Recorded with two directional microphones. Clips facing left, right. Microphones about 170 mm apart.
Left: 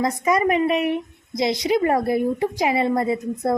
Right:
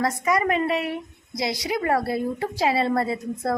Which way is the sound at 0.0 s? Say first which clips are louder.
Left 3 dB; 20° left (ahead or behind).